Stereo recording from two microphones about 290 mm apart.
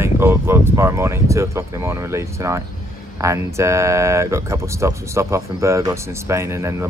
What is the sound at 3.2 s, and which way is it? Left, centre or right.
Speech, centre.